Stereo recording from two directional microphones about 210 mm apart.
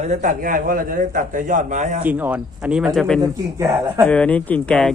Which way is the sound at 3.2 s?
15° right (ahead or behind).